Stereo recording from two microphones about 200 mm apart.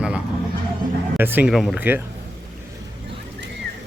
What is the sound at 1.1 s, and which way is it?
Speech, 10° right (ahead or behind).